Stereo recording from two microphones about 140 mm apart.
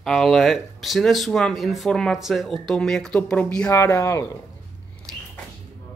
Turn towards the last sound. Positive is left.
turn(degrees=25)  # may be behind; listen again after turning